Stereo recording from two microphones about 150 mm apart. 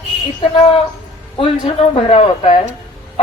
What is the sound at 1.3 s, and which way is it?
Speech, 40° left (ahead or behind).